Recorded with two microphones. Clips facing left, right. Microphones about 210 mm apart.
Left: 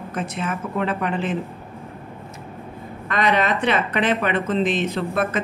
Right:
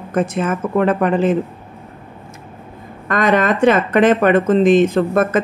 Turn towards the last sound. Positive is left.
turn(degrees=-50)  # may be behind; listen again after turning